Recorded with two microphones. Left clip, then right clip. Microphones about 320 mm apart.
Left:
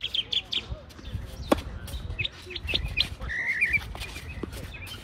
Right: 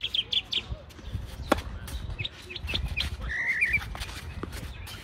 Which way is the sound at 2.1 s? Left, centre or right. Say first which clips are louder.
Left 4 dB; right.